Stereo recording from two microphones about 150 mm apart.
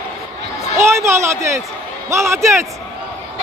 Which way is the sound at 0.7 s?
20° right (ahead or behind).